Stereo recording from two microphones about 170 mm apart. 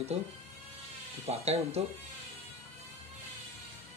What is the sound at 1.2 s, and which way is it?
Speech, 40° right (ahead or behind).